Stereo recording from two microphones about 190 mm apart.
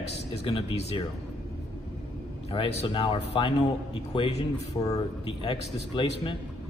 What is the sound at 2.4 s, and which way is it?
A man's voice, 25° left (ahead or behind).